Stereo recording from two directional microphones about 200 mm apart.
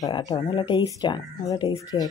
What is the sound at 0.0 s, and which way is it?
Speech, 20° left (ahead or behind).